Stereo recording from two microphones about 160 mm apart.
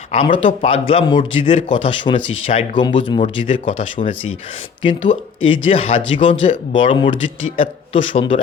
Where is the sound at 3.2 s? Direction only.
55° left (ahead or behind).